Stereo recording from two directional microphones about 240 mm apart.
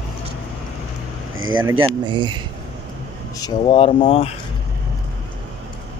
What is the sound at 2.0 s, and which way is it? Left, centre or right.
Speech, centre.